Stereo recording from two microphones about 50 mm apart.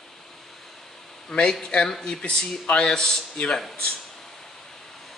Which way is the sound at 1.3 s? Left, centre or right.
Centre.